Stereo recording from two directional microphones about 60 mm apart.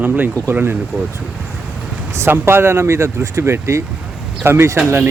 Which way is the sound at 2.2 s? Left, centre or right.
Right.